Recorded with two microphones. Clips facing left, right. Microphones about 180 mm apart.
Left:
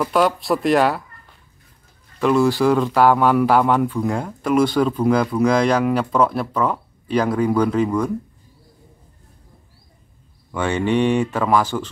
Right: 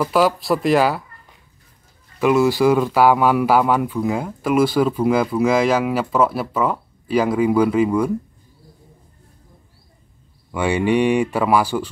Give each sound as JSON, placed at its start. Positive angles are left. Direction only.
{"t": 0.0, "sound": "speech", "side_deg": 0}
{"t": 2.1, "sound": "speech", "side_deg": -5}
{"t": 10.5, "sound": "speech", "side_deg": -10}